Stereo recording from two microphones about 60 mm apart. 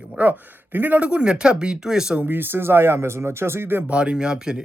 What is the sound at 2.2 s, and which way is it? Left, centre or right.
Speech, right.